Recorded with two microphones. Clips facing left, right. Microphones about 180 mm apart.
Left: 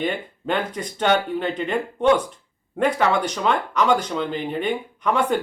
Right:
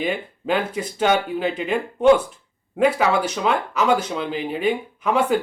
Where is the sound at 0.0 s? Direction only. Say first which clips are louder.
Right 1 dB; 5° right (ahead or behind).